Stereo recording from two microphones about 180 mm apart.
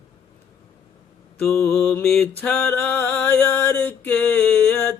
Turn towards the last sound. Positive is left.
turn(degrees=10)  # may be behind; listen again after turning